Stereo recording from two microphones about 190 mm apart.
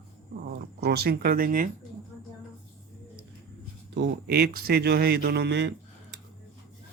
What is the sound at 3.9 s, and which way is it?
Speech, 60° right (ahead or behind).